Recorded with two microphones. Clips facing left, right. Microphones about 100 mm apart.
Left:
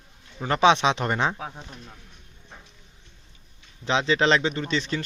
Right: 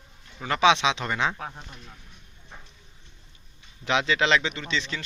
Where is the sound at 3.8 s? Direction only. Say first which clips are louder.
Left 2 dB; 30° left (ahead or behind).